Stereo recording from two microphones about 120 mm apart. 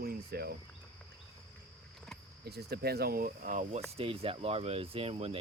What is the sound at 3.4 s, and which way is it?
Speech, 90° right.